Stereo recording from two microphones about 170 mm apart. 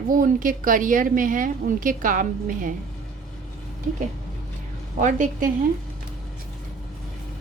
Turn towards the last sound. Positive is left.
turn(degrees=-45)  # may be behind; listen again after turning